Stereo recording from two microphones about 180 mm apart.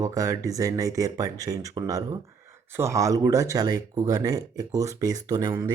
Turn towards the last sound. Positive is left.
turn(degrees=-20)  # may be behind; listen again after turning